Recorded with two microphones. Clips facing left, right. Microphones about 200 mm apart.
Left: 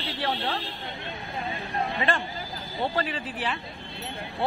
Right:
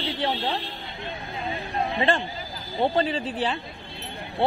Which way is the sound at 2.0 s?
25° right (ahead or behind).